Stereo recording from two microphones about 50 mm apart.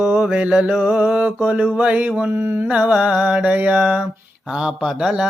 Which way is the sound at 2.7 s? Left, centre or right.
Right.